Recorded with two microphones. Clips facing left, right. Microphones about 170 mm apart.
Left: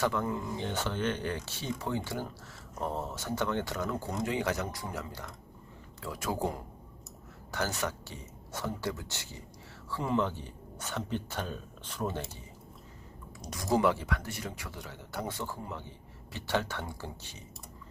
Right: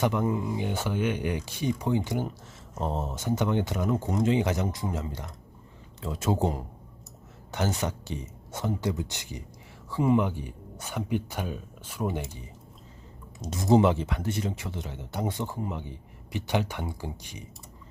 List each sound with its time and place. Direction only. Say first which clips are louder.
0.0 s speech: right 5 dB; 20° right (ahead or behind)